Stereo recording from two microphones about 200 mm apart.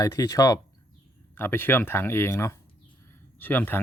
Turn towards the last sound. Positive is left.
turn(degrees=10)  # may be behind; listen again after turning